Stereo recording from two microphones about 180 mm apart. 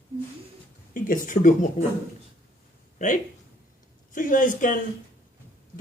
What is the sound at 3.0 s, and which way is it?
Speech, 45° left (ahead or behind).